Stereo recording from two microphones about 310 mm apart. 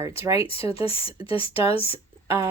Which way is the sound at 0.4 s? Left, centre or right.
Centre.